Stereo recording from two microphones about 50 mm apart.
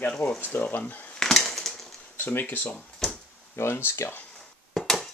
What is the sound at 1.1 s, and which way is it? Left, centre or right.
Splinter, centre.